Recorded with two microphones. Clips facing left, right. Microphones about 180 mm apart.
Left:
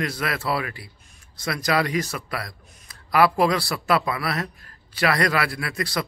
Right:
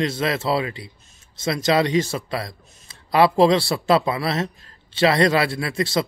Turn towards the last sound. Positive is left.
turn(degrees=-25)  # may be behind; listen again after turning